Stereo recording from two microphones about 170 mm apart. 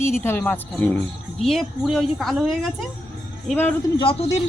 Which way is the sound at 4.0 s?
35° left (ahead or behind).